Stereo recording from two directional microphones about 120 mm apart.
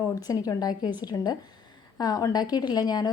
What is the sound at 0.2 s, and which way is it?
A woman's voice, 30° left (ahead or behind).